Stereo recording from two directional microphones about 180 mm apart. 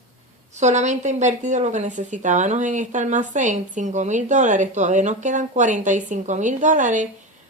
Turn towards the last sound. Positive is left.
turn(degrees=-45)  # may be behind; listen again after turning